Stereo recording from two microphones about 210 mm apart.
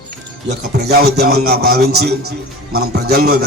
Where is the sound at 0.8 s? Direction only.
50° right (ahead or behind).